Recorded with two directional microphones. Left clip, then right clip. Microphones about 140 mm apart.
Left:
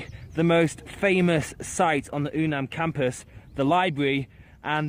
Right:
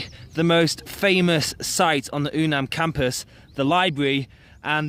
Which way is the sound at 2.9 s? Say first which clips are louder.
Right 3 dB; 20° right (ahead or behind).